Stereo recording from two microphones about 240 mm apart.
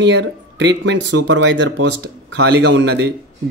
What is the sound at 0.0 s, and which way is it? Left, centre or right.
Speech, right.